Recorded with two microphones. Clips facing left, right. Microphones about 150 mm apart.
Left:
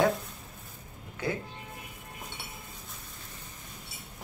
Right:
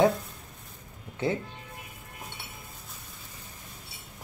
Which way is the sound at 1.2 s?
25° right (ahead or behind).